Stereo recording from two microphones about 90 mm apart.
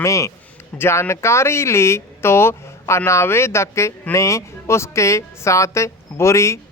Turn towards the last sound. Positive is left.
turn(degrees=30)  # may be behind; listen again after turning